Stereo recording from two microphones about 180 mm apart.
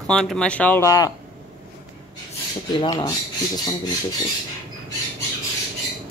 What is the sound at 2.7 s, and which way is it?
Speech, 20° left (ahead or behind).